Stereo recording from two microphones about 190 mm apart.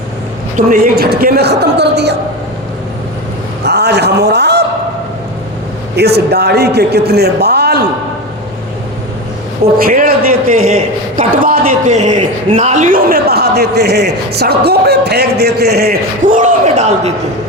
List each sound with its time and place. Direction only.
0.5 s a man's voice: 45° right (ahead or behind); by 2.1 s 60° right (ahead or behind)
3.6 s a sound: 60° right (ahead or behind)
6.0 s a man's voice: 60° right (ahead or behind)
9.7 s a man's voice: 50° right (ahead or behind)